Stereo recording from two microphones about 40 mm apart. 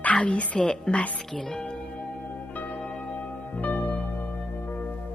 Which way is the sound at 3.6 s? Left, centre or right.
Left.